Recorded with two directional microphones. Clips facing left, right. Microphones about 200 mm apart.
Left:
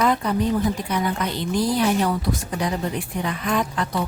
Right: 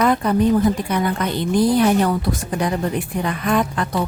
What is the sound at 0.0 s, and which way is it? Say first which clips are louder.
A woman's voice: right 4 dB; 55° right (ahead or behind).